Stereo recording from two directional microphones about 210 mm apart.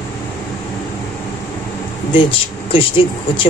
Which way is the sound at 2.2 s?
25° left (ahead or behind).